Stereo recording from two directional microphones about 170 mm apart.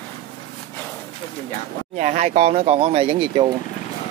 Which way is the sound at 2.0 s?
45° right (ahead or behind).